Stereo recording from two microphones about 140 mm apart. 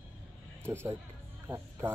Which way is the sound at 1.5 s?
15° right (ahead or behind).